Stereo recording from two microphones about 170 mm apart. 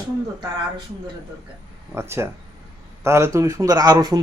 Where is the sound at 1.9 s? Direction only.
15° right (ahead or behind).